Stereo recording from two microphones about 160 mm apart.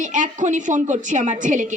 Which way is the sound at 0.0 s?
50° right (ahead or behind).